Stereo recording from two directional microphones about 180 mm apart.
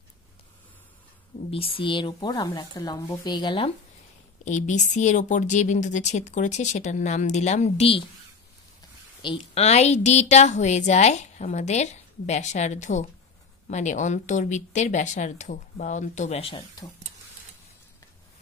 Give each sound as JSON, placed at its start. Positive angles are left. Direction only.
{"t": 1.5, "sound": "speech", "side_deg": 30}
{"t": 4.5, "sound": "speech", "side_deg": 40}
{"t": 9.2, "sound": "speech", "side_deg": 30}